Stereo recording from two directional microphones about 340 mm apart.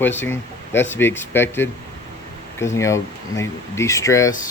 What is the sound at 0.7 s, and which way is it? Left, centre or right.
Speech, centre.